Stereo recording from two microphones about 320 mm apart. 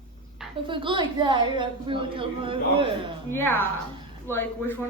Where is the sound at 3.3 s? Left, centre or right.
Centre.